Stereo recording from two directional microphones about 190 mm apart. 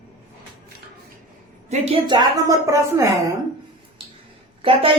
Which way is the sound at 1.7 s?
30° right (ahead or behind).